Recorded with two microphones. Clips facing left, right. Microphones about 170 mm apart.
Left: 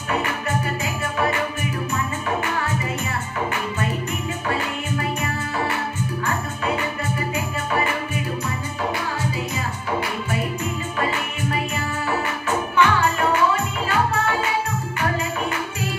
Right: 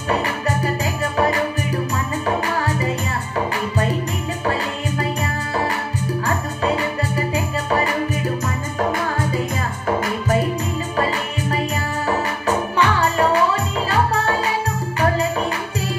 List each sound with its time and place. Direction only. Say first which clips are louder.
4.9 s music: right 1 dB; 35° right (ahead or behind)
12.4 s music: even; 35° right (ahead or behind)